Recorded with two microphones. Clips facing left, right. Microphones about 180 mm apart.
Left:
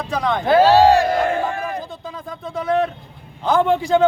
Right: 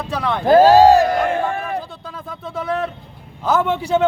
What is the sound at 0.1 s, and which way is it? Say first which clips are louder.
Speech: left 2 dB; 5° right (ahead or behind).